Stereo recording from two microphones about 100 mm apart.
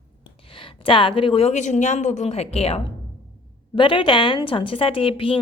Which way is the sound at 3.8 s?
55° left (ahead or behind).